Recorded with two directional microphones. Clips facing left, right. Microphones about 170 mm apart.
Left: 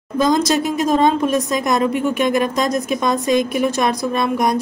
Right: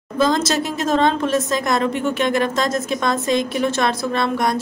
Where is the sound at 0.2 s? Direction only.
15° left (ahead or behind).